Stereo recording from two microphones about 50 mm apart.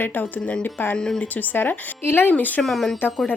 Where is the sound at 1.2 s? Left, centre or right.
Left.